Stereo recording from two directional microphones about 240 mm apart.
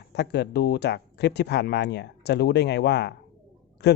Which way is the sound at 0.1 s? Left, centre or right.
Left.